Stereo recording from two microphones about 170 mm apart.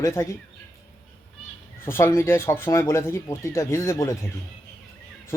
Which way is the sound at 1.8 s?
15° left (ahead or behind).